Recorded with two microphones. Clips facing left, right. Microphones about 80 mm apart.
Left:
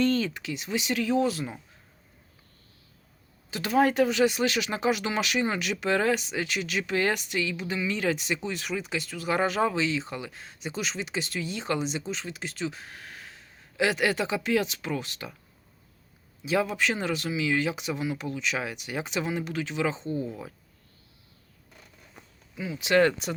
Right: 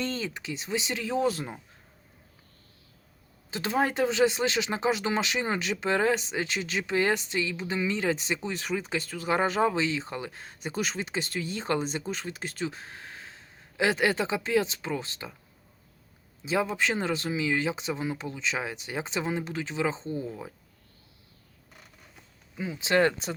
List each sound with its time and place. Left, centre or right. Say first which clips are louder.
0.0 s speech: left 7 dB; right
3.5 s speech: left 4 dB; right
16.4 s speech: left 1 dB; right
22.5 s speech: left 2 dB; right